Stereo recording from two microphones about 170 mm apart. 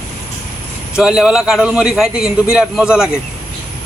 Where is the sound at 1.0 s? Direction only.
5° right (ahead or behind).